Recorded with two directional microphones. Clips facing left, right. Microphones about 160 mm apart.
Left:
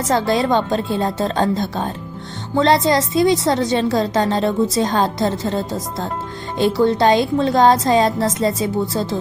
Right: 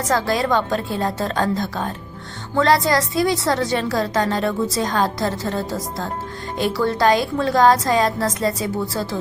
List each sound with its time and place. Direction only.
0.1 s a woman's voice: 25° left (ahead or behind)